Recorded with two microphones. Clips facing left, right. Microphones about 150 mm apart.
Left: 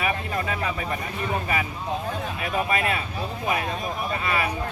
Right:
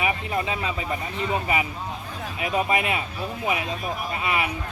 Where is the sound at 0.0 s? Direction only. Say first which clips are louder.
Right 1 dB; 20° right (ahead or behind).